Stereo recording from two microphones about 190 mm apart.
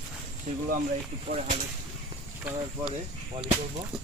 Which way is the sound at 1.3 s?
45° right (ahead or behind).